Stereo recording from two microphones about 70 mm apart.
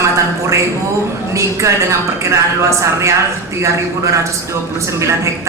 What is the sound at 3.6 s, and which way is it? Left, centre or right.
A woman's voice, right.